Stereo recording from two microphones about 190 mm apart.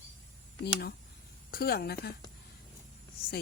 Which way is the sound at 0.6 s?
55° left (ahead or behind).